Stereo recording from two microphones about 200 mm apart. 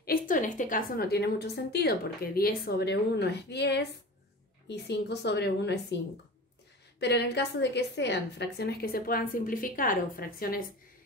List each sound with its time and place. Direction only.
0.0 s a woman's voice: 45° left (ahead or behind)
7.0 s a woman's voice: 60° left (ahead or behind)